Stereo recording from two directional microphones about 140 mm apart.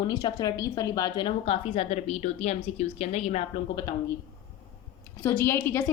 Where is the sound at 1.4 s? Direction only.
45° left (ahead or behind).